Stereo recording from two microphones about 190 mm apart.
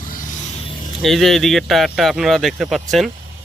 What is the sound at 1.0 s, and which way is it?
Speech, centre (ahead or behind).